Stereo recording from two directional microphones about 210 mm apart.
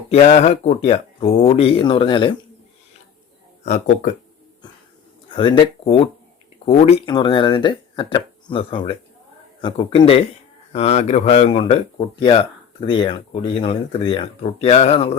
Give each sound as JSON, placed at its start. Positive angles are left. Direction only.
{"t": 0.1, "sound": "speech", "side_deg": 30}
{"t": 3.6, "sound": "speech", "side_deg": 35}
{"t": 5.3, "sound": "speech", "side_deg": 25}